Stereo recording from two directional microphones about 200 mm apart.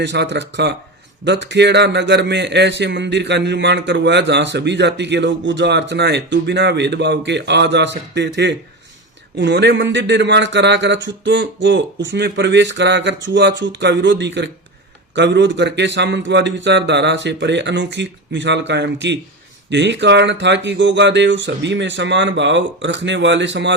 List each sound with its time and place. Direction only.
0.0 s a man's voice: 60° right (ahead or behind)